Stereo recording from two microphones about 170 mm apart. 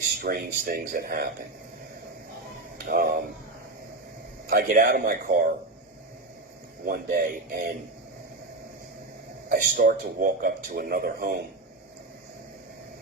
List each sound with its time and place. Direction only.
0.2 s speech: 60° right (ahead or behind)
2.8 s speech: 60° right (ahead or behind)
4.4 s speech: 60° right (ahead or behind)
6.8 s speech: 65° right (ahead or behind)
9.5 s speech: 55° right (ahead or behind)